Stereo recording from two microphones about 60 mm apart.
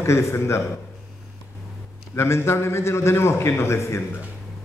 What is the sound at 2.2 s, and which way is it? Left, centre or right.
A man's voice, left.